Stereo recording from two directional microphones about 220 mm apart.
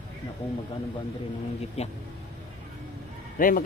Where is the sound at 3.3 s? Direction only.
40° left (ahead or behind).